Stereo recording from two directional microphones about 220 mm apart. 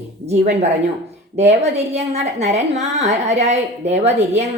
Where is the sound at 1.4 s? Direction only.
30° right (ahead or behind).